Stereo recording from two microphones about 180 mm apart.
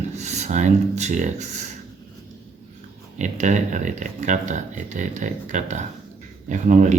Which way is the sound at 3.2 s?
40° right (ahead or behind).